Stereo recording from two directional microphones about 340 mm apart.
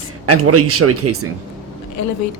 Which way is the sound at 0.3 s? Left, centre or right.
Right.